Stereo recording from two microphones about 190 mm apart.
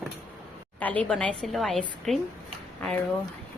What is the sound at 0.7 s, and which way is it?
A woman's voice, 10° left (ahead or behind).